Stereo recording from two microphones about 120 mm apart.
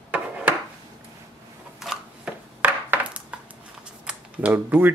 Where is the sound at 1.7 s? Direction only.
5° right (ahead or behind).